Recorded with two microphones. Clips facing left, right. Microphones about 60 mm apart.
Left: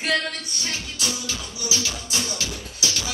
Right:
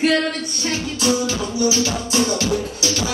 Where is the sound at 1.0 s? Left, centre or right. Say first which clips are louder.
Right 12 dB; right.